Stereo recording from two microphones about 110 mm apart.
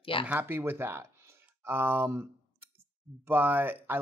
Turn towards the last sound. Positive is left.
turn(degrees=-20)  # may be behind; listen again after turning